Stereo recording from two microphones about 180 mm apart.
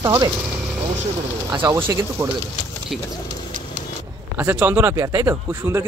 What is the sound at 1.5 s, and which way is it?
Speech, 15° right (ahead or behind).